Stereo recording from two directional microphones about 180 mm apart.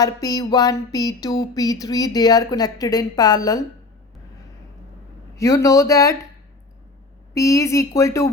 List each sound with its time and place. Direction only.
0.0 s a sound: 20° left (ahead or behind)
5.4 s speech: 15° left (ahead or behind)
7.3 s speech: 15° left (ahead or behind)